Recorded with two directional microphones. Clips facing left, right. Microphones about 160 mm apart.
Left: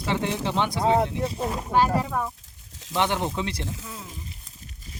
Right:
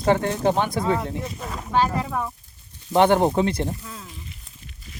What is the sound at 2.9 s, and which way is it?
Speech, 50° right (ahead or behind).